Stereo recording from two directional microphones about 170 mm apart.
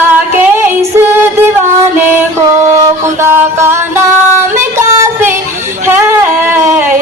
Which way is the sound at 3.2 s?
15° right (ahead or behind).